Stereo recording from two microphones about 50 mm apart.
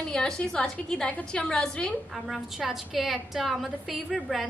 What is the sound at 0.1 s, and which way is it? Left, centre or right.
A woman's voice, centre.